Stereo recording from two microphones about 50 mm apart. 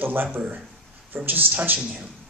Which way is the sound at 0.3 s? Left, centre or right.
Right.